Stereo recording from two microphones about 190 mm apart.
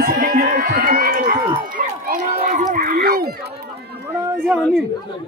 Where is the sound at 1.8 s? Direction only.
50° right (ahead or behind).